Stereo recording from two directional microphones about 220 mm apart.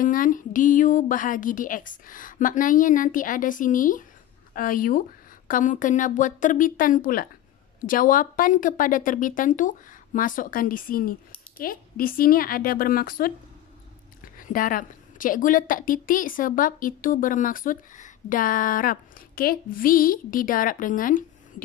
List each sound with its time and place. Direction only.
0.0 s a woman's voice: 35° left (ahead or behind)
14.4 s a woman's voice: 40° left (ahead or behind)